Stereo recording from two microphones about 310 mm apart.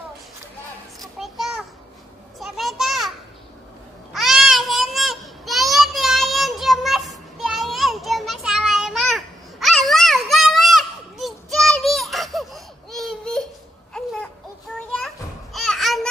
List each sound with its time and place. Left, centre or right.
1.2 s children playing: centre
2.3 s a sound: centre
14.9 s children playing: centre